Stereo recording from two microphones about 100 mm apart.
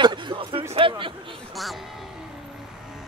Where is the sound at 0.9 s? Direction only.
60° right (ahead or behind).